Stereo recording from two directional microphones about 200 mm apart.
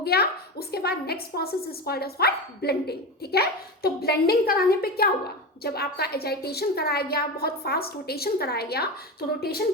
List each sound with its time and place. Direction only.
0.0 s a woman's voice: 50° left (ahead or behind)